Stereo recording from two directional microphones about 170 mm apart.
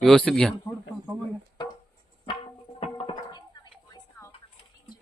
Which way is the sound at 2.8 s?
30° left (ahead or behind).